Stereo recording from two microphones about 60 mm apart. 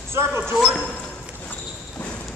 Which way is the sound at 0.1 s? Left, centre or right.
Right.